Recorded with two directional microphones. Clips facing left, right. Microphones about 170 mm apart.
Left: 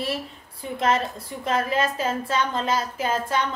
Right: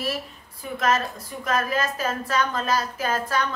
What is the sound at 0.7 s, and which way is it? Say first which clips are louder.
A woman's voice: left 1 dB; 30° left (ahead or behind).